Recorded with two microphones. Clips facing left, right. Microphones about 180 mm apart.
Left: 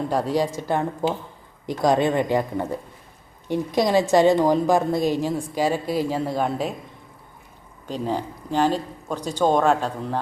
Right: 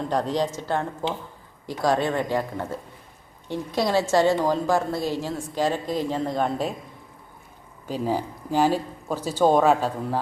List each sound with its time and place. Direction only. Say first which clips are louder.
0.1 s a woman's voice: left 1 dB; 10° left (ahead or behind)
7.9 s speech: even; 5° right (ahead or behind)